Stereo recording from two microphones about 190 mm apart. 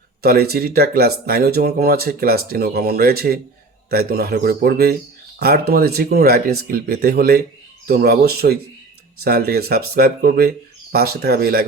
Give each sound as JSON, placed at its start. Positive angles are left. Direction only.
{"t": 0.2, "sound": "speech", "side_deg": -55}